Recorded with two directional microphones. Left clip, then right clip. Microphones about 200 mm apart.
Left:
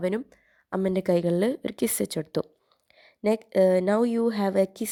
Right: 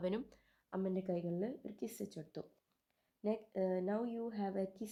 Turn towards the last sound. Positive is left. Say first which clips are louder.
# left 17 dB
turn(degrees=40)  # may be behind; listen again after turning